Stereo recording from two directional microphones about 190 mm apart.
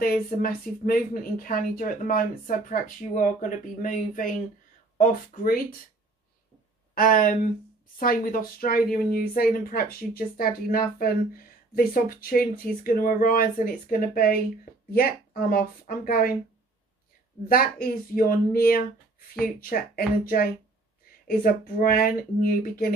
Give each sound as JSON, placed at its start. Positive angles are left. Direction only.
{"t": 0.0, "sound": "speech", "side_deg": 50}
{"t": 7.0, "sound": "speech", "side_deg": 45}
{"t": 17.5, "sound": "speech", "side_deg": 50}
{"t": 21.3, "sound": "speech", "side_deg": 50}